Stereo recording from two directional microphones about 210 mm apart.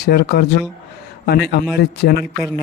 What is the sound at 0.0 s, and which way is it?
Speech, 50° left (ahead or behind).